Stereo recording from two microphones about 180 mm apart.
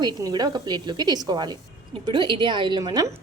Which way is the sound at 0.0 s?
25° right (ahead or behind).